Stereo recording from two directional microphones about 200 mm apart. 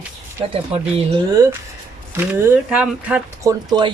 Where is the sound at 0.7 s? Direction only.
30° right (ahead or behind).